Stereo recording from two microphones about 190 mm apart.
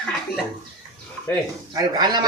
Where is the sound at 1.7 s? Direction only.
20° right (ahead or behind).